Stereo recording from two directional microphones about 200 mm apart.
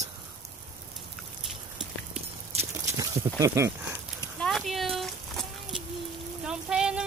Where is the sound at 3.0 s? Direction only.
15° right (ahead or behind).